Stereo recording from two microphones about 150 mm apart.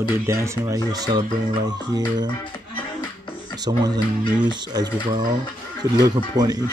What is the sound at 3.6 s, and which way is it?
Speech, 30° right (ahead or behind).